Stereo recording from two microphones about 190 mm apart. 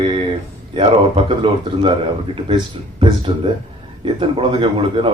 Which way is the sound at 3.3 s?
30° right (ahead or behind).